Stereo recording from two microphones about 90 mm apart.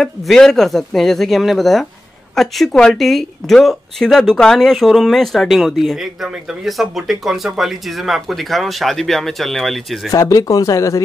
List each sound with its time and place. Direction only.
0.0 s speech: 5° left (ahead or behind)
10.1 s speech: 40° left (ahead or behind)